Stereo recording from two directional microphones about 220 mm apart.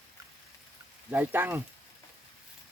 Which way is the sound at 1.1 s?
10° right (ahead or behind).